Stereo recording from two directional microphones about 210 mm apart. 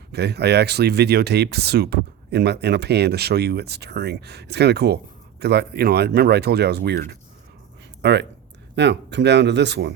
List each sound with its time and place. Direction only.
0.1 s speech: 50° right (ahead or behind)
8.0 s speech: 55° right (ahead or behind)